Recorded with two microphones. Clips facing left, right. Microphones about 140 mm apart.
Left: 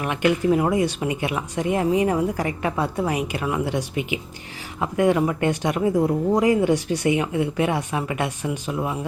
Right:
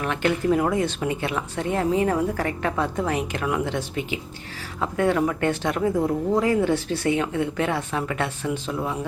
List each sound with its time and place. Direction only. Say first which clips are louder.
0.0 s speech: left 2 dB; 15° left (ahead or behind)